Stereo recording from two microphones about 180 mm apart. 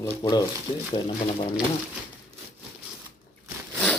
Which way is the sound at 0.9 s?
30° left (ahead or behind).